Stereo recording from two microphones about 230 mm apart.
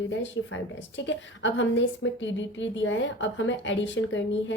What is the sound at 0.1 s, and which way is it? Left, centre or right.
A woman's voice, left.